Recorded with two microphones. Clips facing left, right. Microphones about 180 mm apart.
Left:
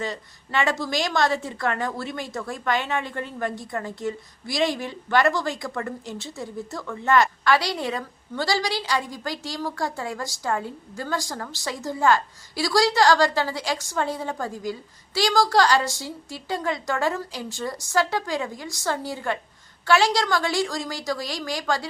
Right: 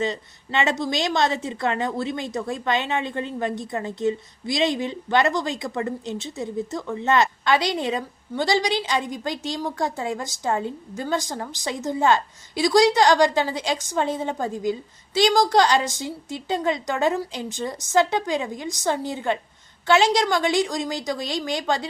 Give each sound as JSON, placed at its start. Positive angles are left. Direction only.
{"t": 0.0, "sound": "a woman's voice", "side_deg": -20}